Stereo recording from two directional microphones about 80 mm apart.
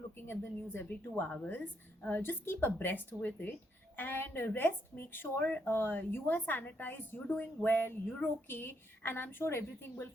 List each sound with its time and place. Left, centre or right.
0.3 s speech: left